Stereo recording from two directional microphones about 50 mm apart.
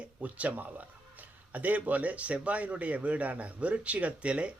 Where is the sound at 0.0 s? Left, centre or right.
Right.